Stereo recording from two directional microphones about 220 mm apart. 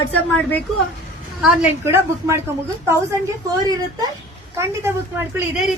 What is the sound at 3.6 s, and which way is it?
Speech, 15° right (ahead or behind).